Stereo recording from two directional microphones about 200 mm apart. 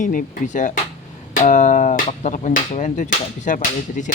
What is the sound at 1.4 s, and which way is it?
Music, 40° left (ahead or behind).